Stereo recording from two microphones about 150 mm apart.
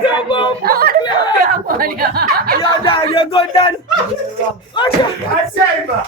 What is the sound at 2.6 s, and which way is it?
Speech, 40° left (ahead or behind).